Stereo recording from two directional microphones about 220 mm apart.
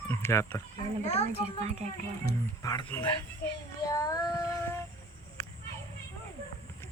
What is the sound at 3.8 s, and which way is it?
Child singing, 15° left (ahead or behind).